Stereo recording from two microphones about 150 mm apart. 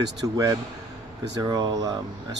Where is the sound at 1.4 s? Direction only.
25° right (ahead or behind).